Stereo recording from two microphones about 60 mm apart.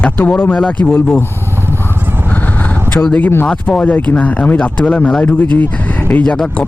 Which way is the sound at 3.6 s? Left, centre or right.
Left.